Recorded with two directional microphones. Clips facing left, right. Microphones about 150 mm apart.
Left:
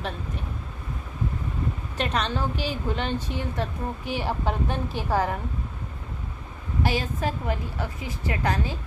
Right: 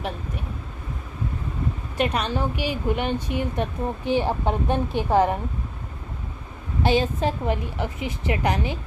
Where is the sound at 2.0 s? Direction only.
10° right (ahead or behind).